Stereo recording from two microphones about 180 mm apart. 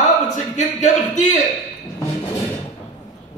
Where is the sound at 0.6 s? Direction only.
45° left (ahead or behind).